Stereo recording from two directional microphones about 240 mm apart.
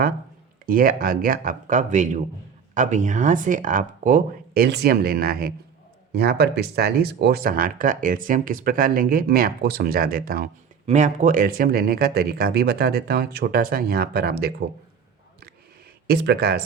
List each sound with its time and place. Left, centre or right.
0.6 s speech: right
16.0 s speech: right